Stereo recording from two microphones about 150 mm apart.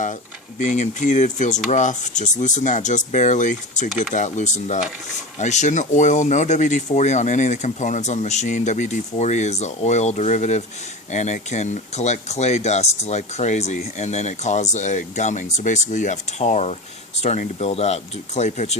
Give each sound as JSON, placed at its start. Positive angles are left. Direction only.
{"t": 0.6, "sound": "speech", "side_deg": 55}